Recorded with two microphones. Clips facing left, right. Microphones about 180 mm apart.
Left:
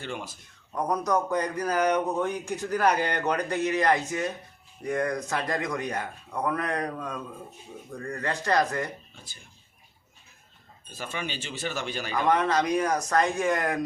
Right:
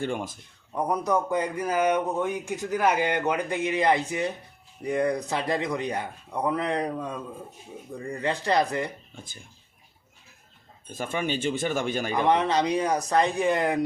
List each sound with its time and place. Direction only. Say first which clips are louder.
0.0 s speech: right 6 dB; 50° right (ahead or behind)
0.7 s speech: right 1 dB; 10° right (ahead or behind)
1.5 s a man's voice: right 1 dB; 20° right (ahead or behind)
1.8 s speech: right 1 dB; 5° right (ahead or behind)
10.8 s speech: right 6 dB; 50° right (ahead or behind)
12.1 s a man's voice: right 1 dB; 25° right (ahead or behind)
12.5 s a man's voice: right 1 dB; 15° right (ahead or behind)